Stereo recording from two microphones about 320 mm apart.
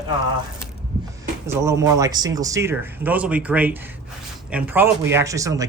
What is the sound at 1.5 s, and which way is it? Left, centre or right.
Speech, centre.